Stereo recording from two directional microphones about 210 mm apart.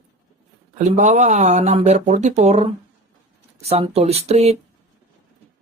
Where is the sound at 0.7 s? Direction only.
35° right (ahead or behind).